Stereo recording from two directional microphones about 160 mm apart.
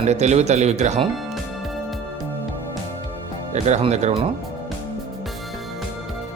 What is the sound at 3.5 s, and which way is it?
Speech, 45° right (ahead or behind).